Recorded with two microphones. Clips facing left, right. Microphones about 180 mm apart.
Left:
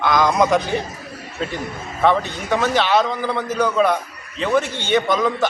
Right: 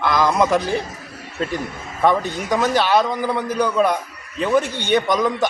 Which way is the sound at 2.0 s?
10° right (ahead or behind).